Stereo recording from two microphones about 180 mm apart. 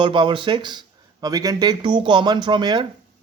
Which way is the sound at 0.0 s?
25° right (ahead or behind).